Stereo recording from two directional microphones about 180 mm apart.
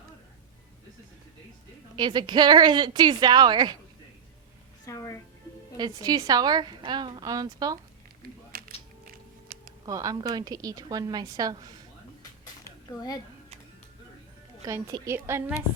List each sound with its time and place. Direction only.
2.0 s a woman's voice: 25° right (ahead or behind)
4.9 s a sound: 20° left (ahead or behind)
5.7 s a woman's voice: 25° right (ahead or behind)
8.5 s music: 55° right (ahead or behind)
9.8 s a woman's voice: 20° right (ahead or behind)
14.6 s a woman's voice: 20° right (ahead or behind)